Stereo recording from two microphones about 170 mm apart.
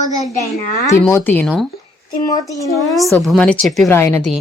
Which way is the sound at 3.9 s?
15° left (ahead or behind).